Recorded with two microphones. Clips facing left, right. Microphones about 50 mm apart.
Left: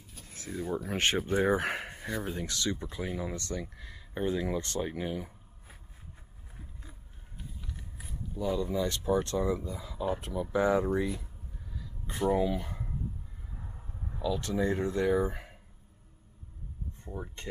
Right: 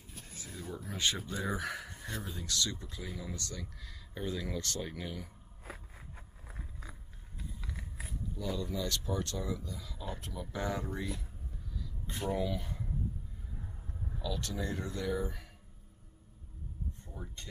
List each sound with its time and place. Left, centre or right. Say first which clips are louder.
0.5 s speech: left 10 dB; left
0.7 s speech: left 5 dB; left
2.4 s speech: left 3 dB; left
5.7 s a sound: right 6 dB; right
8.4 s speech: left 7 dB; left
12.4 s speech: left 5 dB; left
13.6 s a sound: even; centre
14.2 s speech: left 8 dB; left
17.0 s speech: left 6 dB; left